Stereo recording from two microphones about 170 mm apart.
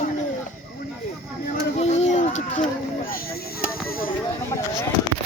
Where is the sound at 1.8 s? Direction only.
40° left (ahead or behind).